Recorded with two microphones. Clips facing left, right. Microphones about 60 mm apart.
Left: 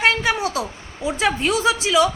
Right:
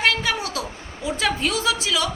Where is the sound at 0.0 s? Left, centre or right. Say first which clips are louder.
Left 3 dB; left.